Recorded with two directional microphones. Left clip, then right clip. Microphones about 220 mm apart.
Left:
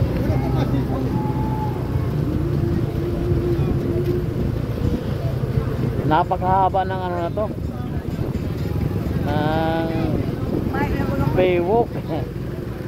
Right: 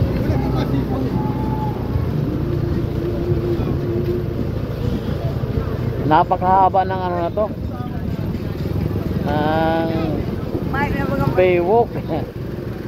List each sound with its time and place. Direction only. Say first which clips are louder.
6.0 s speech: right 4 dB; 10° left (ahead or behind)
9.3 s speech: right 4 dB; 5° left (ahead or behind)
11.3 s speech: right 3 dB; 5° left (ahead or behind)